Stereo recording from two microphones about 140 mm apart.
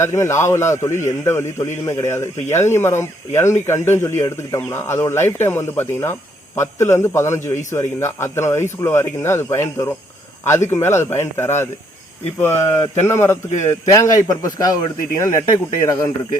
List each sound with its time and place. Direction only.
0.0 s a man's voice: 20° left (ahead or behind)